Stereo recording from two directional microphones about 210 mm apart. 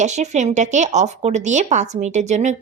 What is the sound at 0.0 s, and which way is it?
A woman's voice, 35° right (ahead or behind).